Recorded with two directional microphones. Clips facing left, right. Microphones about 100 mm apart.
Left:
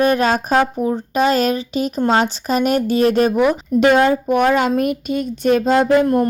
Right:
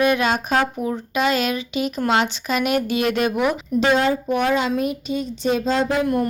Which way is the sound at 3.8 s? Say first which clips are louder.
Left 5 dB; 55° left (ahead or behind).